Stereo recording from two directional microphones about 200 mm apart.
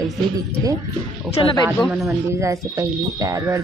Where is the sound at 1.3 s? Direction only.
25° left (ahead or behind).